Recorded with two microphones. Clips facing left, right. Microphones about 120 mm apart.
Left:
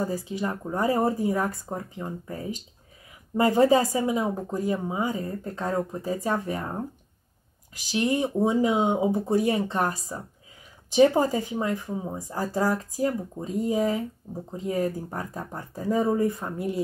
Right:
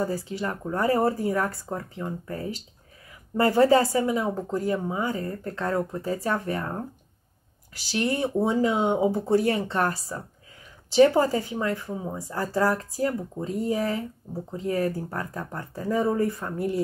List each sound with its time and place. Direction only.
0.0 s speech: 15° left (ahead or behind)
7.9 s speech: 20° left (ahead or behind)